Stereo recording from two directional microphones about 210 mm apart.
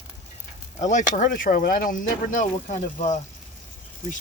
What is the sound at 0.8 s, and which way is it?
Speech, 35° left (ahead or behind).